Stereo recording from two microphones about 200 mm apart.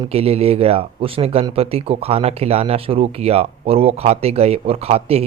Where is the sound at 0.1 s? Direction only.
30° right (ahead or behind).